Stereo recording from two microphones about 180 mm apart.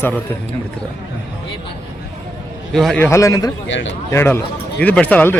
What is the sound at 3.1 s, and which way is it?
Speech, 15° left (ahead or behind).